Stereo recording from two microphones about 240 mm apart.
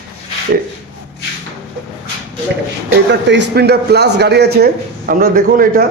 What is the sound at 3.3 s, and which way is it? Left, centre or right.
A man's voice, right.